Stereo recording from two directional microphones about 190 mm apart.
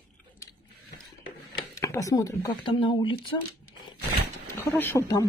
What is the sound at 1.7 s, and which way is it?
Speech, 15° left (ahead or behind).